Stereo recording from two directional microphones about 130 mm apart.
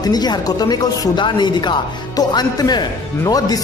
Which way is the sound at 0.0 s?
30° left (ahead or behind).